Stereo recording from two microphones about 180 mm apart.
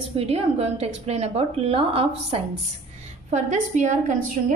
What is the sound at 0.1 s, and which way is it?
A woman's voice, 35° right (ahead or behind).